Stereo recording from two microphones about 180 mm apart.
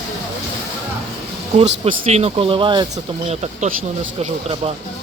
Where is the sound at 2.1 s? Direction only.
35° right (ahead or behind).